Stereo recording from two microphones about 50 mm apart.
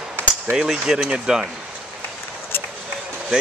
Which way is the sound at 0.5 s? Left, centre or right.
Centre.